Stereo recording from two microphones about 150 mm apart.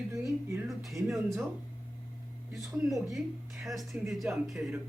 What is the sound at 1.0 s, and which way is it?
Speech, centre (ahead or behind).